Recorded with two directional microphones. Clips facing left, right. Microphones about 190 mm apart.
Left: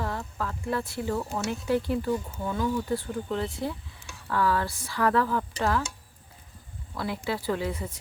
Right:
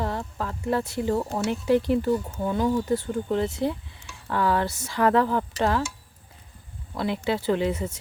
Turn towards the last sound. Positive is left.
turn(degrees=-25)  # may be behind; listen again after turning